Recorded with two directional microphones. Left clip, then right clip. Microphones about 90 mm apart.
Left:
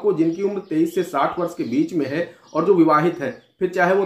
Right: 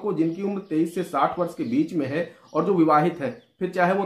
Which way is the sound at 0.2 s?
25° right (ahead or behind).